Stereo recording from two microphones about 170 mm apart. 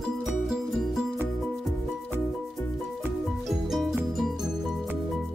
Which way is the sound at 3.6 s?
Centre (ahead or behind).